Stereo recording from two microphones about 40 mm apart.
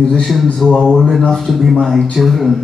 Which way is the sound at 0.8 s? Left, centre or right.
Centre.